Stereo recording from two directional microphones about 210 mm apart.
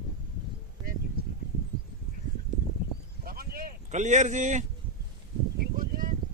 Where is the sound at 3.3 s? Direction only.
45° right (ahead or behind).